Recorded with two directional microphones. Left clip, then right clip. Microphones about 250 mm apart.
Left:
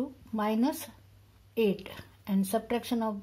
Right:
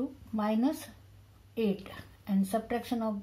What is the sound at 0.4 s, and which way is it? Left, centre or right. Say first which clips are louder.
Speech: left 1 dB; left.